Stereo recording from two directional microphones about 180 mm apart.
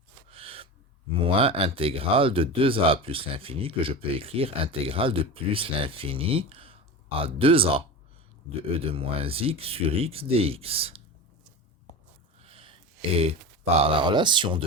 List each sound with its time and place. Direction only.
0.3 s gasp: 30° right (ahead or behind)
1.2 s speech: 30° right (ahead or behind)
8.9 s speech: 30° right (ahead or behind)
12.4 s a sound: 30° right (ahead or behind)
13.7 s speech: 30° right (ahead or behind)